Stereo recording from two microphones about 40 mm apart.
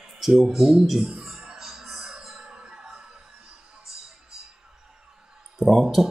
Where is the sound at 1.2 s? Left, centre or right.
Centre.